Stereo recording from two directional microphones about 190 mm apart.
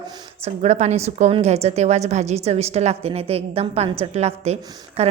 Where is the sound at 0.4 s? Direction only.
35° right (ahead or behind).